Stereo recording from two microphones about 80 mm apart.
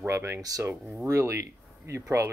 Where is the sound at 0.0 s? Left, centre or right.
Right.